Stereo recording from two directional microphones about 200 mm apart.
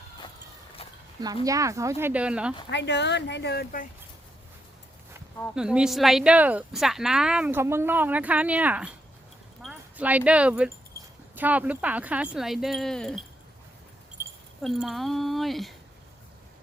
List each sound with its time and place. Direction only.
0.8 s a sound: 30° left (ahead or behind)
1.5 s speech: 15° right (ahead or behind)
2.6 s speech: 60° left (ahead or behind)
5.5 s speech: 5° right (ahead or behind)
14.2 s keys jangling: 10° right (ahead or behind)
14.6 s speech: centre (ahead or behind)